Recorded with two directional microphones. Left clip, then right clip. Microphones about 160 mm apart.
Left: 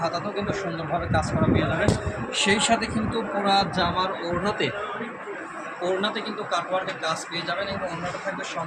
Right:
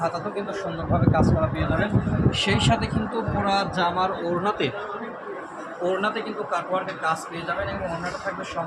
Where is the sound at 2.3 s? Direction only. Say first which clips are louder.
Left 2 dB; 5° left (ahead or behind).